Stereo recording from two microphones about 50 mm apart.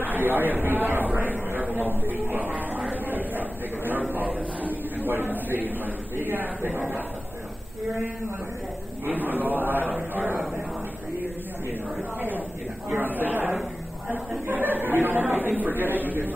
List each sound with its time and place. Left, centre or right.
0.0 s a man's voice: right
9.0 s a man's voice: right
12.2 s a man's voice: right
14.5 s a man's voice: right